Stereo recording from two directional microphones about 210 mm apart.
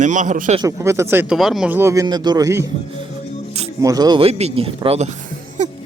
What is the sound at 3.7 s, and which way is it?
Speech, 15° right (ahead or behind).